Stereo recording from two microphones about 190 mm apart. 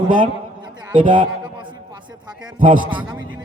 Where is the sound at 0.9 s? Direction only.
45° right (ahead or behind).